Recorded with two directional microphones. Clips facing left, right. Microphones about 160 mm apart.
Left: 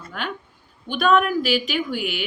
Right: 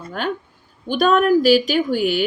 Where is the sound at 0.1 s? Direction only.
40° right (ahead or behind).